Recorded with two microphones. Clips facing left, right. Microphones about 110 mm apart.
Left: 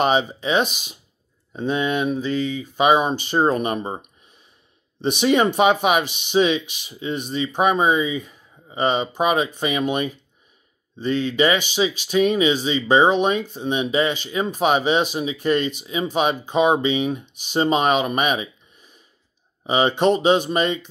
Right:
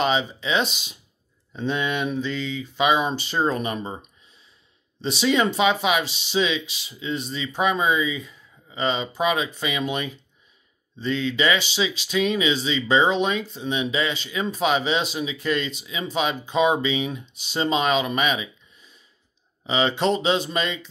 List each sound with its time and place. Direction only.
0.0 s speech: 50° left (ahead or behind)
1.5 s speech: 10° left (ahead or behind)
2.7 s speech: 50° left (ahead or behind)
5.0 s speech: 55° left (ahead or behind)